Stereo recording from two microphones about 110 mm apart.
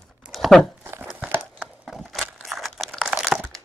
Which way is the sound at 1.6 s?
Centre (ahead or behind).